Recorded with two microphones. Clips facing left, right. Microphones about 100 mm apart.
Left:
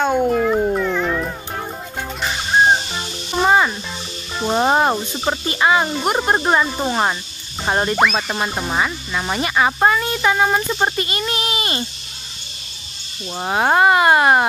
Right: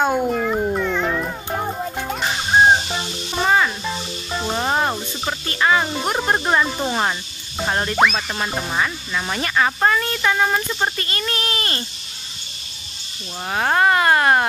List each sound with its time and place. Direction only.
0.2 s cat: centre (ahead or behind)
3.4 s music: 20° left (ahead or behind)
5.9 s speech: 10° left (ahead or behind)
7.6 s music: 20° left (ahead or behind)
7.9 s music: centre (ahead or behind)
8.5 s speech: 15° left (ahead or behind)
13.4 s speech: 20° left (ahead or behind)